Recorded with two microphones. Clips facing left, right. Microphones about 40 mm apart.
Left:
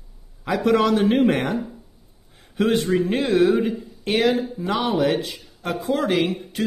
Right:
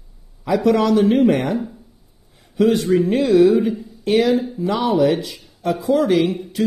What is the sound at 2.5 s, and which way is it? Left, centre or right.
A man's voice, left.